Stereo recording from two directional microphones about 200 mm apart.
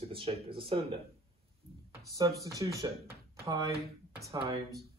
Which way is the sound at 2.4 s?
15° right (ahead or behind).